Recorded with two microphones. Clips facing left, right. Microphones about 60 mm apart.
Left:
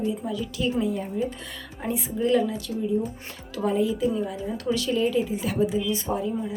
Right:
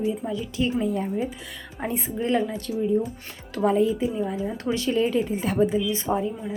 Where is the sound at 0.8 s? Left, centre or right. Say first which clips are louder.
Right 1 dB; right.